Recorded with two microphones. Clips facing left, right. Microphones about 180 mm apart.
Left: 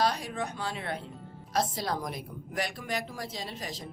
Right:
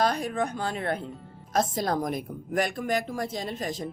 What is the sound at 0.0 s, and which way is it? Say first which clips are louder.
Speech: right 4 dB; 50° right (ahead or behind).